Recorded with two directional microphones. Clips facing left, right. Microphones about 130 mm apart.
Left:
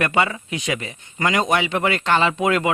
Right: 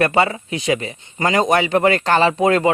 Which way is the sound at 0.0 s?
35° right (ahead or behind).